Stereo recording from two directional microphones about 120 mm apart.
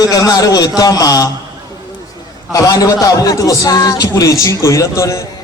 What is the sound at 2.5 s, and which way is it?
A man's voice, 30° left (ahead or behind).